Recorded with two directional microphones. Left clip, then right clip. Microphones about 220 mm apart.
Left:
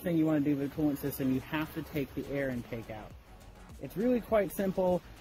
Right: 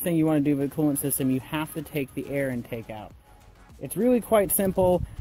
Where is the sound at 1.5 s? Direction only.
35° right (ahead or behind).